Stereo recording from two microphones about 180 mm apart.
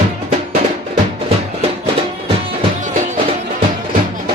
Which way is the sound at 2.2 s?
30° right (ahead or behind).